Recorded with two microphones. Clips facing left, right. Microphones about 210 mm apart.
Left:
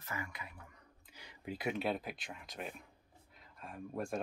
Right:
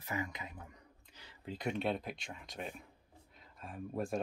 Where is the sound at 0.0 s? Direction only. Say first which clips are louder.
Right 5 dB; 20° right (ahead or behind).